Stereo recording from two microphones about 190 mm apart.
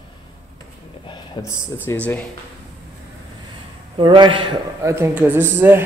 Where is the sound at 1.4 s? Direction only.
15° left (ahead or behind).